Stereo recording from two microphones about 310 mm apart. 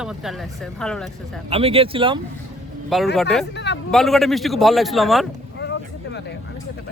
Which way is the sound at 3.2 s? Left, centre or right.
Centre.